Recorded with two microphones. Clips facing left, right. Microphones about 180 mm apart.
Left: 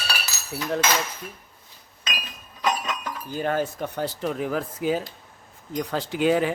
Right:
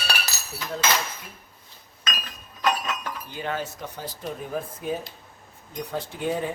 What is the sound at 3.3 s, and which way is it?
Speech, 45° left (ahead or behind).